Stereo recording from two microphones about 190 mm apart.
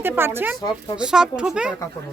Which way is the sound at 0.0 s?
10° right (ahead or behind).